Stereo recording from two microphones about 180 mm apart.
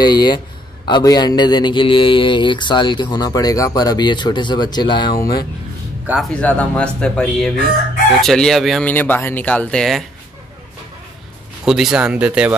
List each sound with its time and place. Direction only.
0.0 s speech: 25° left (ahead or behind)
6.3 s speech: 5° left (ahead or behind)
11.6 s speech: 5° right (ahead or behind)